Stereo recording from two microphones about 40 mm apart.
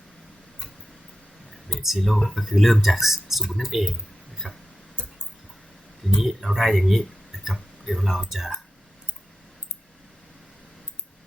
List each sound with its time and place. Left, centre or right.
1.7 s speech: centre
4.4 s tick-tock: right
6.1 s speech: centre
7.4 s a sound: centre
8.3 s speech: centre